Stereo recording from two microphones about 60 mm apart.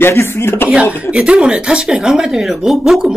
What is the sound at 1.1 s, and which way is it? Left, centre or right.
Speech, centre.